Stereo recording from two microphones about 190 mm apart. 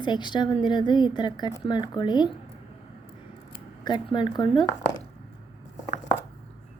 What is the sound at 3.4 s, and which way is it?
Speech, 25° left (ahead or behind).